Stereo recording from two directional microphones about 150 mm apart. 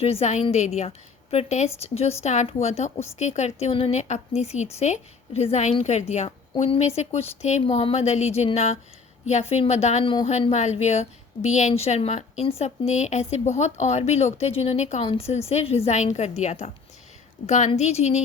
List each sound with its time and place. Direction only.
0.0 s a woman's voice: 45° left (ahead or behind)